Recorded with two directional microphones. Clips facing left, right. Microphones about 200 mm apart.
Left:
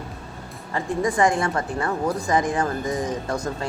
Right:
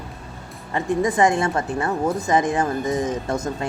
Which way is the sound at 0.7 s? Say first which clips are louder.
Right 3 dB; 20° right (ahead or behind).